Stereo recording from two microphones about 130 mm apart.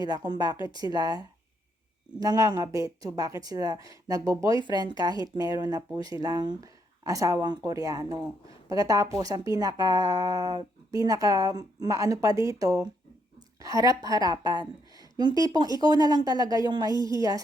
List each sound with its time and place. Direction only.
0.3 s speech: 30° right (ahead or behind)